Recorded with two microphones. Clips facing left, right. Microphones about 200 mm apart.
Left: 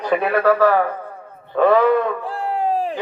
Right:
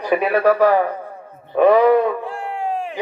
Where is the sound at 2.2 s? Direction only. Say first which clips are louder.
Left 3 dB; 35° left (ahead or behind).